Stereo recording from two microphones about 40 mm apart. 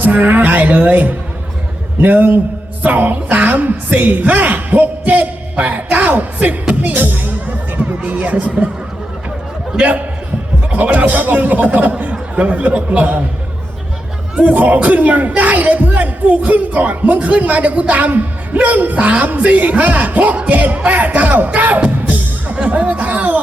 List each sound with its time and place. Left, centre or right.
0.0 s a woman's voice: right
9.7 s speech: right
14.4 s speech: right